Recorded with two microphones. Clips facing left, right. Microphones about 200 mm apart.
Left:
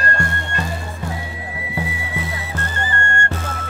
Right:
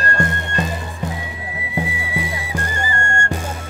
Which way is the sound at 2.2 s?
15° right (ahead or behind).